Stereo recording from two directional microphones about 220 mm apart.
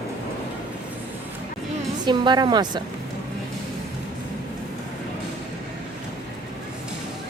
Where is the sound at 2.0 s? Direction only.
20° right (ahead or behind).